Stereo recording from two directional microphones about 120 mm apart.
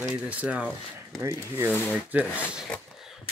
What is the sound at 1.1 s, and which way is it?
Speech, 25° right (ahead or behind).